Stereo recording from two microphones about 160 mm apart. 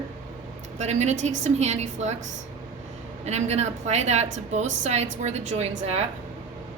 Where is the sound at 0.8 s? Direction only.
45° right (ahead or behind).